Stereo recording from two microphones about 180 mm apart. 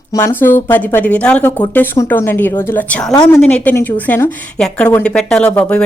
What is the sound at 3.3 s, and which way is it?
A woman's voice, 5° left (ahead or behind).